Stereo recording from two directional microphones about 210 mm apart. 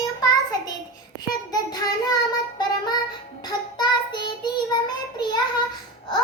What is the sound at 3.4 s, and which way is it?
Child singing, 20° left (ahead or behind).